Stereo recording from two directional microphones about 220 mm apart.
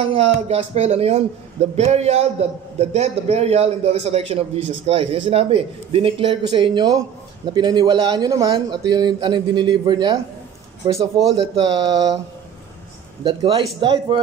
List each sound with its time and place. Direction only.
0.1 s a man's voice: 30° right (ahead or behind)
13.2 s a man's voice: 25° right (ahead or behind)